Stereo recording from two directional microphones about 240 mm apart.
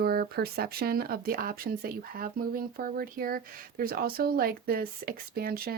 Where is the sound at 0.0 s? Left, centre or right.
Right.